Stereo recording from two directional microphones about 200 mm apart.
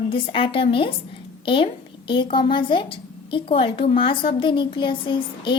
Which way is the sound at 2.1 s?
25° left (ahead or behind).